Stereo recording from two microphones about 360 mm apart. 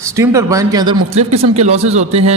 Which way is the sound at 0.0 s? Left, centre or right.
Centre.